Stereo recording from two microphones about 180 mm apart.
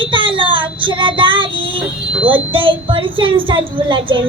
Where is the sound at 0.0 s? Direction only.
30° right (ahead or behind).